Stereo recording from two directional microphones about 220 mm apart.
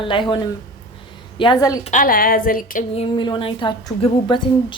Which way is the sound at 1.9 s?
40° left (ahead or behind).